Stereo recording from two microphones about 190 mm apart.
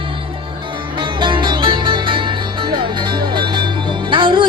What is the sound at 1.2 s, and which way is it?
Music, 25° right (ahead or behind).